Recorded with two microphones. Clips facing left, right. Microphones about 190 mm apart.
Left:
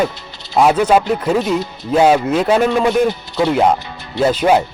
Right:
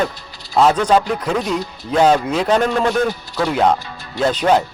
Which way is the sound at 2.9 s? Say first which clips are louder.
Left 4 dB; 20° left (ahead or behind).